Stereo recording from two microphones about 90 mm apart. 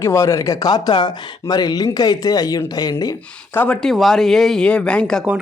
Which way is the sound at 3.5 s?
20° left (ahead or behind).